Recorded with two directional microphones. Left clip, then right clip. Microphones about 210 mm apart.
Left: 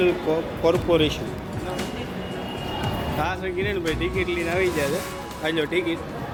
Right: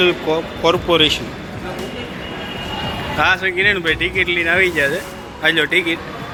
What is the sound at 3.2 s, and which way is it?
Speech, centre (ahead or behind).